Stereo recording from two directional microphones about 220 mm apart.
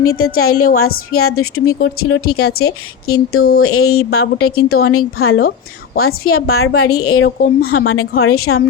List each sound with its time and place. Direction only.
0.0 s a woman's voice: 75° left (ahead or behind)